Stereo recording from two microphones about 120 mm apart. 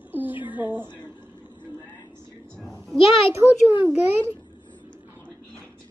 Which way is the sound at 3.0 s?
50° left (ahead or behind).